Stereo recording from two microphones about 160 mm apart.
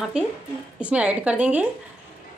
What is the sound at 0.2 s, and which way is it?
A woman's voice, 5° right (ahead or behind).